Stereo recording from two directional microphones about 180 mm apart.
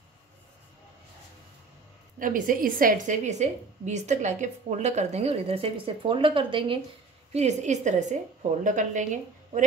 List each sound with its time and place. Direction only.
2.1 s a woman's voice: 50° right (ahead or behind); by 6.8 s 30° right (ahead or behind)
7.3 s a woman's voice: 40° right (ahead or behind)